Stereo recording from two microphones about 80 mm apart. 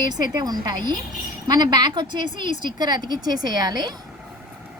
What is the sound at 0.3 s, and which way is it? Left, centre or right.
A woman's voice, right.